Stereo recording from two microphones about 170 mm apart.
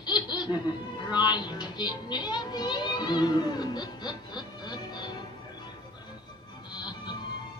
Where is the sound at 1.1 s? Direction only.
25° left (ahead or behind).